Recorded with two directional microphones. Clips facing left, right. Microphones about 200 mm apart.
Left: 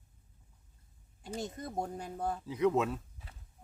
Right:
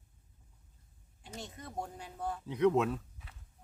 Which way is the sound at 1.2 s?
40° left (ahead or behind).